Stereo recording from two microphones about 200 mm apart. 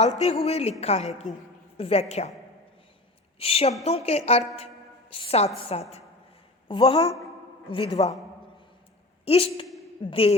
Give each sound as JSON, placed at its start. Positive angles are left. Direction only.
{"t": 0.0, "sound": "a woman's voice", "side_deg": 30}
{"t": 3.3, "sound": "a woman's voice", "side_deg": 30}
{"t": 9.2, "sound": "a woman's voice", "side_deg": 30}